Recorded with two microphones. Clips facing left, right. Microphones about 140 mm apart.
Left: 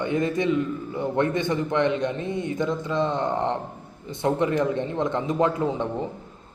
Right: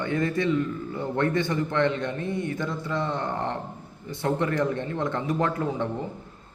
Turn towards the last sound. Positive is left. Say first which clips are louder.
# left 2 dB
turn(degrees=20)  # may be behind; listen again after turning